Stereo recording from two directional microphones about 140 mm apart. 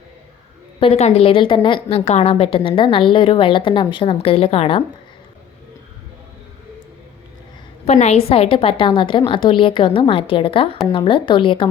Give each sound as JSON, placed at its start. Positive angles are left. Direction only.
{"t": 0.8, "sound": "a woman's voice", "side_deg": 45}
{"t": 2.0, "sound": "a woman's voice", "side_deg": 50}
{"t": 7.9, "sound": "a woman's voice", "side_deg": 50}